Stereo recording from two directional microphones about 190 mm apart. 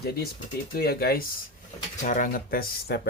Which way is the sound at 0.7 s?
55° left (ahead or behind).